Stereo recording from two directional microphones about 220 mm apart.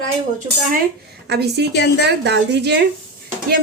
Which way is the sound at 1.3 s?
50° right (ahead or behind).